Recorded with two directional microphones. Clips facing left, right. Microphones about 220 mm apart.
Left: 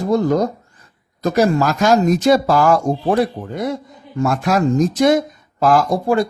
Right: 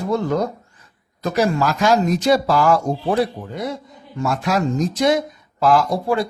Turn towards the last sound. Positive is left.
turn(degrees=45)  # may be behind; listen again after turning